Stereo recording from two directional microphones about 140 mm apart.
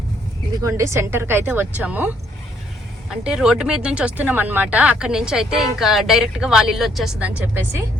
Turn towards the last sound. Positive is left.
turn(degrees=-10)  # may be behind; listen again after turning